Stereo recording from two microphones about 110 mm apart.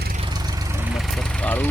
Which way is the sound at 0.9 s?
5° left (ahead or behind).